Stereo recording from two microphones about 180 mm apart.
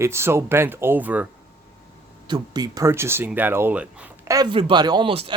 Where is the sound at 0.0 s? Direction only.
15° right (ahead or behind).